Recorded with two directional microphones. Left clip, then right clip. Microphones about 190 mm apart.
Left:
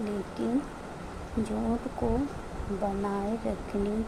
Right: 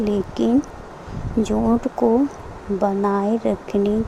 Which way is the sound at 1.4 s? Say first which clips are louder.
Right 12 dB; 45° right (ahead or behind).